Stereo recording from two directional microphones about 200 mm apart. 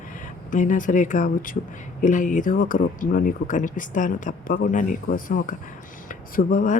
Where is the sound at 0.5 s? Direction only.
40° left (ahead or behind).